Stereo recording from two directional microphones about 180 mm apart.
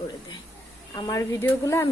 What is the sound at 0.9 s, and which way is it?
Speech, 20° left (ahead or behind).